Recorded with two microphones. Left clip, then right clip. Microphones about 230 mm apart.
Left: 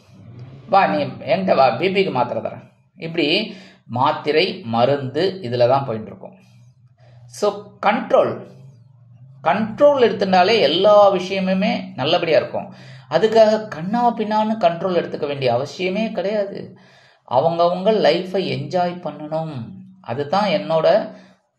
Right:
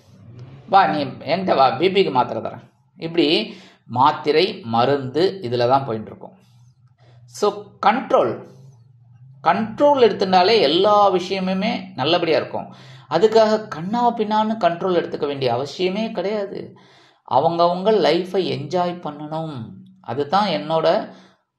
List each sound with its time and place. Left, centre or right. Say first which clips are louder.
0.4 s a sound: right 1 dB; right
1.3 s a man's voice: left 1 dB; right
7.3 s a man's voice: even; right
9.4 s a man's voice: left 2 dB; right